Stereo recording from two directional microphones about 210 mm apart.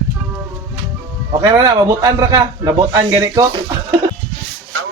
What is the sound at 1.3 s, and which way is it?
A man's voice, 20° right (ahead or behind).